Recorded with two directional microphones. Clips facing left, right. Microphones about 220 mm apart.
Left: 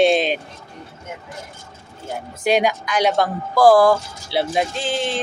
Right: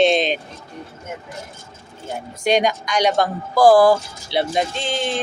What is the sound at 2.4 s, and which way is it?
Speech, 5° left (ahead or behind).